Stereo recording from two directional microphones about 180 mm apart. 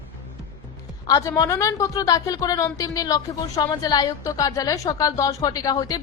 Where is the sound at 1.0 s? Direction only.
20° left (ahead or behind).